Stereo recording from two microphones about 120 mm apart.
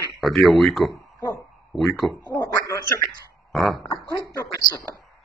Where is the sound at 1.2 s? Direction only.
30° left (ahead or behind).